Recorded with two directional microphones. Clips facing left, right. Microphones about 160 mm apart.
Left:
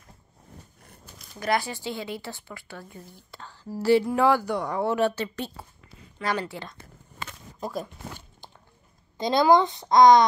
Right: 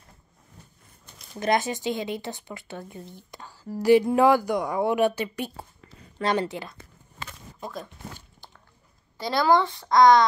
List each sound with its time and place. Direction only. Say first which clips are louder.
1.0 s zipper: right 5 dB; centre (ahead or behind)
1.4 s speech: right 3 dB; 20° right (ahead or behind)
6.2 s a woman's voice: right 4 dB; 25° right (ahead or behind)
7.6 s speech: left 4 dB; 5° left (ahead or behind)
9.2 s a woman's voice: left 2 dB; 20° left (ahead or behind)